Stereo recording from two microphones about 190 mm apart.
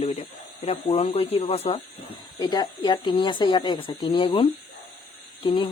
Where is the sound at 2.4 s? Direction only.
20° left (ahead or behind).